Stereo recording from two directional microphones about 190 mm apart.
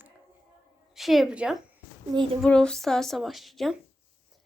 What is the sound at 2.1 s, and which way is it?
Child singing, 20° right (ahead or behind).